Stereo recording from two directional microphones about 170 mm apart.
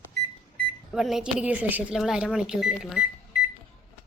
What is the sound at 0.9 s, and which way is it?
Speech, centre (ahead or behind).